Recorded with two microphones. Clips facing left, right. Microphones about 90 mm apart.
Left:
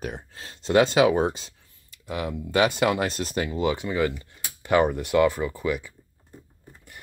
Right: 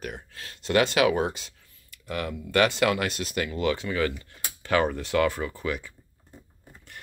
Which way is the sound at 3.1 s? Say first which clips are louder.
Left 3 dB; 40° left (ahead or behind).